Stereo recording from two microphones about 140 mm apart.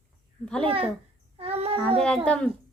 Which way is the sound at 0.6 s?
40° right (ahead or behind).